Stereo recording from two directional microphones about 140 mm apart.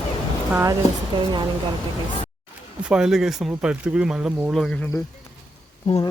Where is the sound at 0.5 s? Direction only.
20° right (ahead or behind).